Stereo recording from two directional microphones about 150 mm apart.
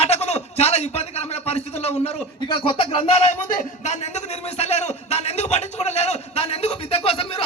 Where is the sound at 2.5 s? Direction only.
35° left (ahead or behind).